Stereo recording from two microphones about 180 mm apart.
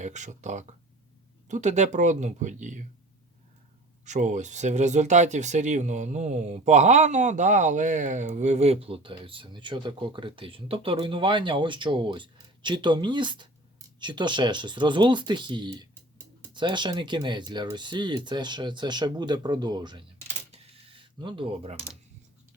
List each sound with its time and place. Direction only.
0.0 s speech: 40° right (ahead or behind)
4.0 s speech: 40° right (ahead or behind); by 20.1 s 25° right (ahead or behind)
20.5 s cash register: 30° right (ahead or behind)